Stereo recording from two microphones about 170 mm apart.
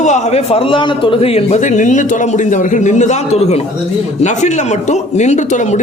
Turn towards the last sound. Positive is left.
turn(degrees=45)  # may be behind; listen again after turning